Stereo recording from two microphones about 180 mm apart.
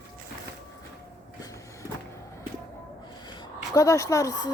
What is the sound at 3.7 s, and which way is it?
Speech, 20° left (ahead or behind).